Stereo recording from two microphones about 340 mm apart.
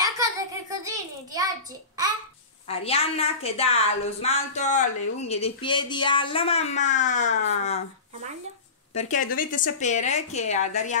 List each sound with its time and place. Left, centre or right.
0.0 s child singing: centre
2.7 s speech: centre
8.9 s a woman's voice: left